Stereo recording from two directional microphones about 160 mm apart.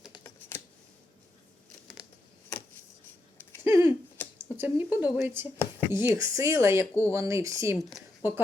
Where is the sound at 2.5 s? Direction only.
15° left (ahead or behind).